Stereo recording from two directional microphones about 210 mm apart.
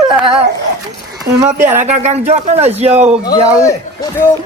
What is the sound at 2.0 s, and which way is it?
Speech, 35° right (ahead or behind).